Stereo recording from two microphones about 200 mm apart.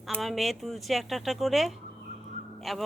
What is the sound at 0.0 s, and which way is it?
Speech, centre (ahead or behind).